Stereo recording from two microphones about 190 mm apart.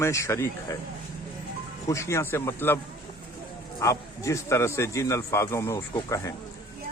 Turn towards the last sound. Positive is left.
turn(degrees=15)  # may be behind; listen again after turning